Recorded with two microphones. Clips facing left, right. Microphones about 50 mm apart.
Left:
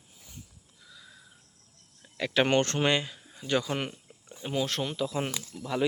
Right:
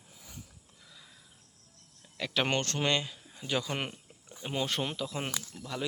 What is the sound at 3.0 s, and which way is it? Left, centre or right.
Speech, centre.